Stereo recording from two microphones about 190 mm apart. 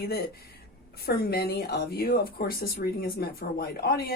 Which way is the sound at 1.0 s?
55° left (ahead or behind).